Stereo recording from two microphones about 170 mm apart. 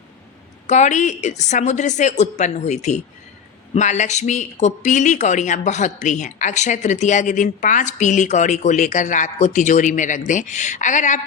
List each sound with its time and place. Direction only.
0.7 s speech: 45° left (ahead or behind)